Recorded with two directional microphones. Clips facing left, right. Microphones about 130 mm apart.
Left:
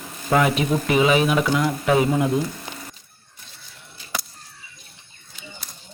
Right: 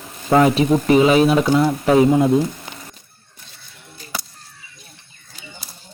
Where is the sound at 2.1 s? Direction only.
25° right (ahead or behind).